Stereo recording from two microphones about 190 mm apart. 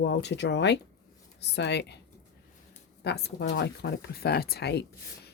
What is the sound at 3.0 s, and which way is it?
Speech, 60° left (ahead or behind).